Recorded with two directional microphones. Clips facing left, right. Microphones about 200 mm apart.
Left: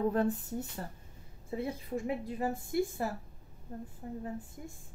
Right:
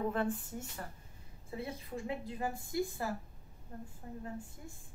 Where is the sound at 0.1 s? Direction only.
40° left (ahead or behind).